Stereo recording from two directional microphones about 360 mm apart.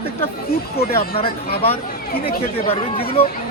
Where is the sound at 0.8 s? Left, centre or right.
Left.